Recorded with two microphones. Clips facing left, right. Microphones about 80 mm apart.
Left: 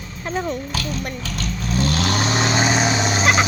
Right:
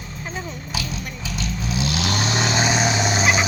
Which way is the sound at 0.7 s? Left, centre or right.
Centre.